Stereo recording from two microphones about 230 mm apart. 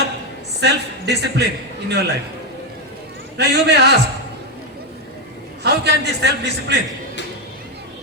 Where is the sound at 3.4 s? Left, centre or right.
Right.